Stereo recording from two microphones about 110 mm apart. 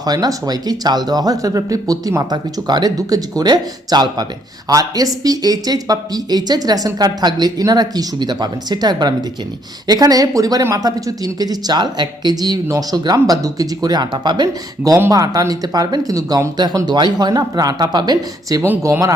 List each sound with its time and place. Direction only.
0.0 s speech: 35° right (ahead or behind)
18.6 s speech: 25° right (ahead or behind)